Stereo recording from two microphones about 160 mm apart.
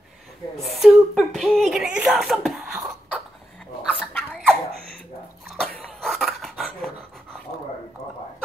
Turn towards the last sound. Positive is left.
turn(degrees=0)  # may be behind; listen again after turning